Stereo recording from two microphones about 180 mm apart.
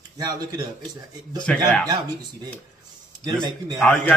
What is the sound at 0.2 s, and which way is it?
Speech, 25° right (ahead or behind).